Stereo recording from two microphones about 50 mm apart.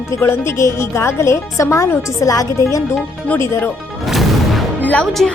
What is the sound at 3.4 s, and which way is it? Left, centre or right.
Speech, left.